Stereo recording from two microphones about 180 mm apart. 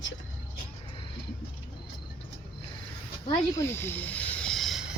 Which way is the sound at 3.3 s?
15° left (ahead or behind).